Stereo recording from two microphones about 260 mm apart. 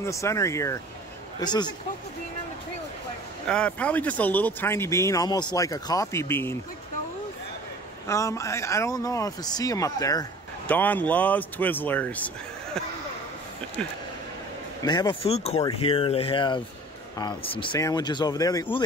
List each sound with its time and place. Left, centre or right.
0.0 s speech: centre
3.4 s speech: centre
8.1 s speech: centre
14.8 s speech: centre